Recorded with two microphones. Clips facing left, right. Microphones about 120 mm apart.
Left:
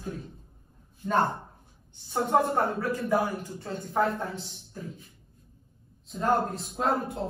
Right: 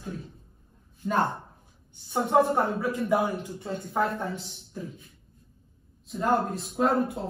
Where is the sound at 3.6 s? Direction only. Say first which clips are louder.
Left 1 dB; 5° right (ahead or behind).